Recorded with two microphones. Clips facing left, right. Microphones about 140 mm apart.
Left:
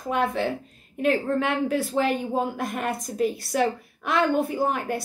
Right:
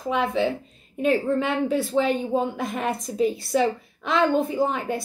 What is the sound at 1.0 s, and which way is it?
A woman's voice, centre (ahead or behind).